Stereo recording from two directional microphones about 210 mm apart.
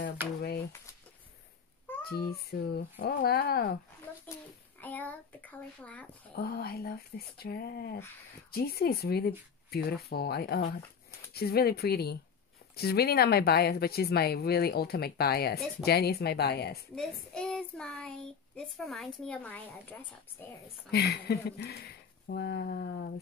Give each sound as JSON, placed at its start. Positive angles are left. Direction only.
{"t": 0.2, "sound": "speech", "side_deg": -10}
{"t": 2.0, "sound": "speech", "side_deg": 45}
{"t": 4.7, "sound": "a child's voice", "side_deg": 10}
{"t": 6.3, "sound": "speech", "side_deg": 50}
{"t": 16.9, "sound": "child singing", "side_deg": 5}
{"t": 18.9, "sound": "a woman's voice", "side_deg": 0}
{"t": 20.9, "sound": "speech", "side_deg": 50}